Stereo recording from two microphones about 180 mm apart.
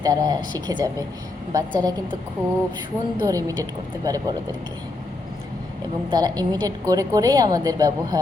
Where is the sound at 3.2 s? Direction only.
20° right (ahead or behind).